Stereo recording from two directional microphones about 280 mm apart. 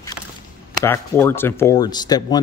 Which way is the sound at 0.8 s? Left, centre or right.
Centre.